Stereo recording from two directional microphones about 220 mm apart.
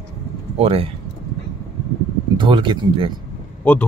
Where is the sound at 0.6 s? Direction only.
25° right (ahead or behind).